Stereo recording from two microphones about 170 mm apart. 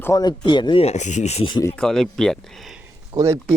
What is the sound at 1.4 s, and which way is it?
Speech, 25° left (ahead or behind).